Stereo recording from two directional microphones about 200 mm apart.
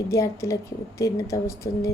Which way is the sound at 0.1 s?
15° left (ahead or behind).